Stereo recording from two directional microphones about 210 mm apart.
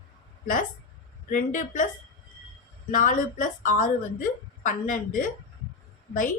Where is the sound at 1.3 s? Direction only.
40° left (ahead or behind).